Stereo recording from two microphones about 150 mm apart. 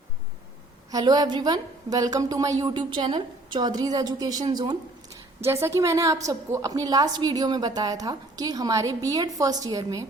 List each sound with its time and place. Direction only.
0.9 s a woman's voice: 25° right (ahead or behind)